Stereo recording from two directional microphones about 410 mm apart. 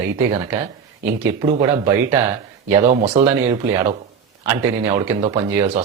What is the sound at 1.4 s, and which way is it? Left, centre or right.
A man's voice, centre.